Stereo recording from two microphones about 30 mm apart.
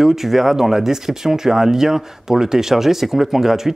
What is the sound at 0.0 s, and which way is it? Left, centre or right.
Speech, centre.